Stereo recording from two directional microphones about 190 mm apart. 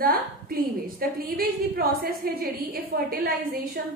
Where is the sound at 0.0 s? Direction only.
50° right (ahead or behind).